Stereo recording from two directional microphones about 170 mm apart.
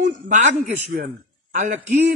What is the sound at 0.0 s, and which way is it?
A man's voice, 45° right (ahead or behind).